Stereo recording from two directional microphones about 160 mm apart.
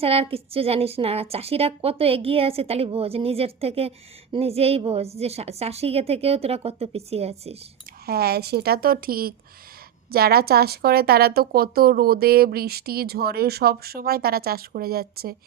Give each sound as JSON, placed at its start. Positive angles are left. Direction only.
{"t": 0.0, "sound": "a woman's voice", "side_deg": -35}
{"t": 8.0, "sound": "a woman's voice", "side_deg": -75}